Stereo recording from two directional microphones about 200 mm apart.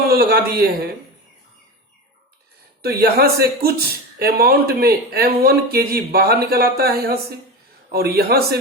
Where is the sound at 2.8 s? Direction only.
50° right (ahead or behind).